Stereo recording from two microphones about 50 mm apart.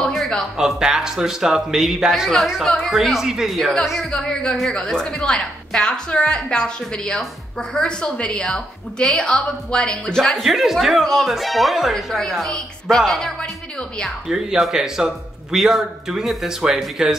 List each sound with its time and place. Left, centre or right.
0.0 s a sound: centre
0.6 s a man's voice: centre
4.1 s speech: centre
10.4 s speech: centre
14.2 s a man's voice: centre